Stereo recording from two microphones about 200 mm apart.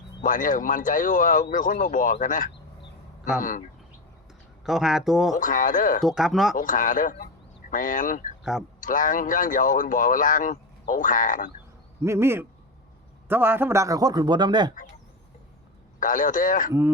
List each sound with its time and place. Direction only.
0.2 s speech: 40° left (ahead or behind)
4.6 s speech: centre (ahead or behind)
5.4 s speech: 40° left (ahead or behind)
6.0 s speech: centre (ahead or behind)
6.6 s speech: 40° left (ahead or behind)
12.0 s a man's voice: 15° right (ahead or behind)
16.0 s speech: 40° left (ahead or behind)